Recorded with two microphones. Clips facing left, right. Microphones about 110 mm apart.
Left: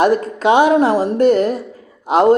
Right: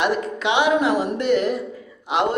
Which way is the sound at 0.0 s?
40° left (ahead or behind).